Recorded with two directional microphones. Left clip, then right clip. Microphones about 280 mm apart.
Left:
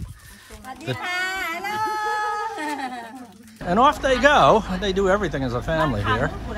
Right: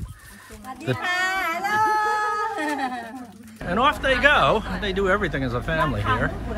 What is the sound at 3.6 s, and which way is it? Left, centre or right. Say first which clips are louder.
Speech: left 3 dB; centre.